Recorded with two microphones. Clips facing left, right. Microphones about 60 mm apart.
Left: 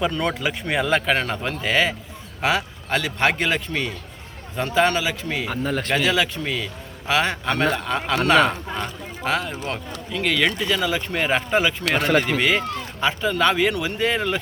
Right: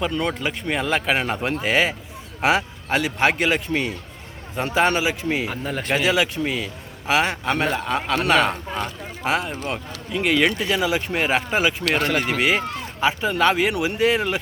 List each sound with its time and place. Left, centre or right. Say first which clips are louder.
0.0 s a man's voice: left 1 dB; centre
5.5 s speech: left 1 dB; centre